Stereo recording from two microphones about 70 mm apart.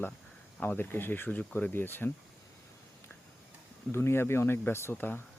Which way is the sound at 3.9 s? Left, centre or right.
Left.